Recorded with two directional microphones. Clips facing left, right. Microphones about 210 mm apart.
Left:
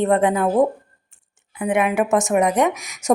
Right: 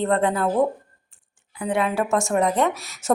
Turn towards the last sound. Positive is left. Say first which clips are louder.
# left 3 dB
turn(degrees=15)  # may be behind; listen again after turning